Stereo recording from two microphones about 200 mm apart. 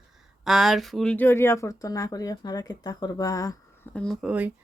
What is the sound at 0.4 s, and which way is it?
Speech, centre (ahead or behind).